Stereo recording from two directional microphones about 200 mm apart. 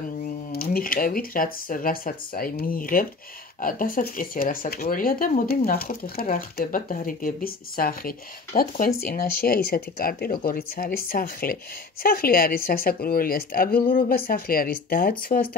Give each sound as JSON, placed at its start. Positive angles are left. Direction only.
{"t": 0.5, "sound": "speech", "side_deg": 50}